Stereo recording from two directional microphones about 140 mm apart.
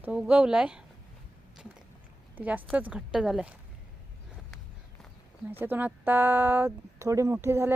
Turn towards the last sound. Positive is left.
turn(degrees=-20)  # may be behind; listen again after turning